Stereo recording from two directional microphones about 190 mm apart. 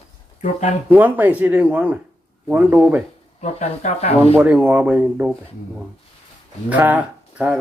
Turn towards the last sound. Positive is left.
turn(degrees=-10)  # may be behind; listen again after turning